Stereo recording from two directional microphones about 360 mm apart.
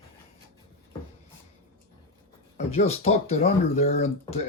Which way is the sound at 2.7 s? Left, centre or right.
Centre.